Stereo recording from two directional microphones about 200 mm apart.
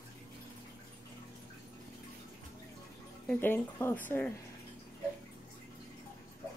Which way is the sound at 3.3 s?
10° left (ahead or behind).